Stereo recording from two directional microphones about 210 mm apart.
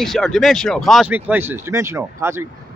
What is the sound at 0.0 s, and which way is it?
Speech, centre (ahead or behind).